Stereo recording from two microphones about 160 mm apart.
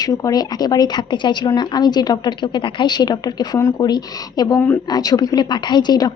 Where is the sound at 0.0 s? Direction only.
20° left (ahead or behind).